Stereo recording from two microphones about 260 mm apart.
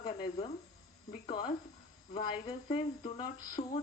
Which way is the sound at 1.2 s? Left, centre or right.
Centre.